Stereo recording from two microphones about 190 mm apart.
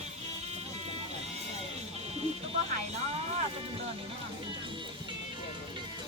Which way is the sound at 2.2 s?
35° right (ahead or behind).